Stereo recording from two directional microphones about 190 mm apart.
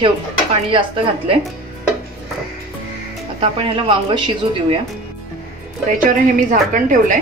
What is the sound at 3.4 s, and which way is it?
Speech, 25° right (ahead or behind).